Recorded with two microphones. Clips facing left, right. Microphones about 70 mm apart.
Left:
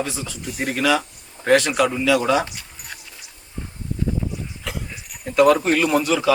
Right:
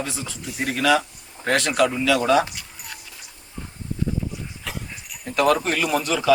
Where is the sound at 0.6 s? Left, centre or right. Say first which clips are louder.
Even; centre.